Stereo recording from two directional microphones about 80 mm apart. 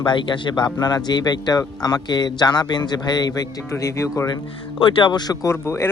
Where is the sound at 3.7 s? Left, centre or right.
Left.